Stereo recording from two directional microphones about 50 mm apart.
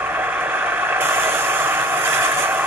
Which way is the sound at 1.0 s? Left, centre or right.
Right.